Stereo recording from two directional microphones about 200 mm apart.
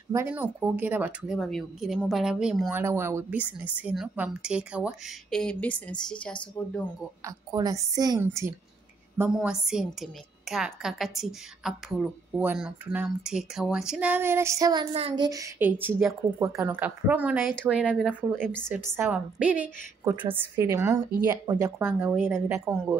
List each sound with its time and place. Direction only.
0.1 s a woman's voice: 10° right (ahead or behind)
2.7 s a woman's voice: 15° right (ahead or behind); by 6.7 s 5° left (ahead or behind)
7.2 s a woman's voice: 15° right (ahead or behind)